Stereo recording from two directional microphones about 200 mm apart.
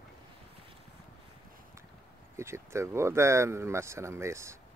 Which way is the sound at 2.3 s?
15° right (ahead or behind).